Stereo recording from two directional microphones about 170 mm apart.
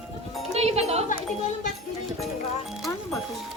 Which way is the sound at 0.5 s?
40° right (ahead or behind).